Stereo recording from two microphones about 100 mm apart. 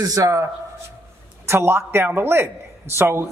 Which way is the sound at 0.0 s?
35° right (ahead or behind).